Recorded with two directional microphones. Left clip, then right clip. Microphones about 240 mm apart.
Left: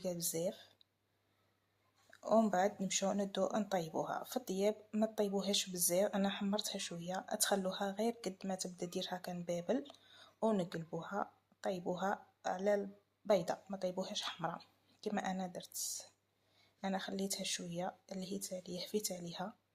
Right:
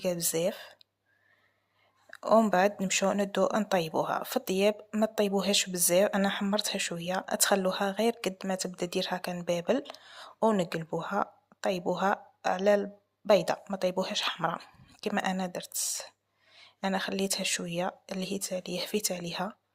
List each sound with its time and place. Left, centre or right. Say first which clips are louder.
0.0 s speech: right 10 dB; right
2.0 s speech: right 9 dB; right